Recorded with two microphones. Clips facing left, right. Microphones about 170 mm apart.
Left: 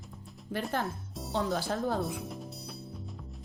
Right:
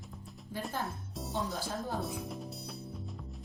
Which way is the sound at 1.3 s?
70° left (ahead or behind).